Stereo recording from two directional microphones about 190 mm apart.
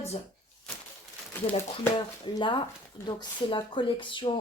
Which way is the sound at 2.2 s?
25° left (ahead or behind).